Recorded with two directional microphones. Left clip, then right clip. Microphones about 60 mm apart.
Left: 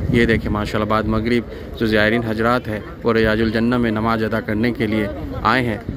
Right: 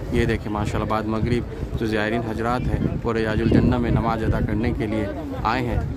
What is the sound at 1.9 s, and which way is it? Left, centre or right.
Speech, left.